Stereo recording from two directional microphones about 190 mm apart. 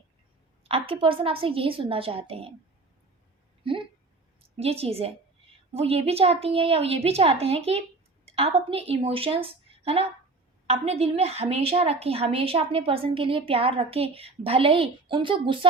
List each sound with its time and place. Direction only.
0.6 s a woman's voice: 30° right (ahead or behind)
3.6 s a woman's voice: 25° right (ahead or behind)